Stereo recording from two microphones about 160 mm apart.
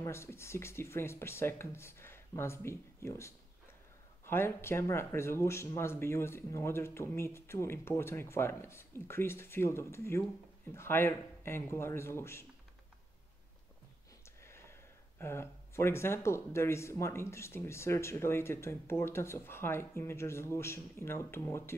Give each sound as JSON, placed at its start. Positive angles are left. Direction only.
{"t": 0.0, "sound": "speech", "side_deg": 15}
{"t": 14.2, "sound": "speech", "side_deg": 15}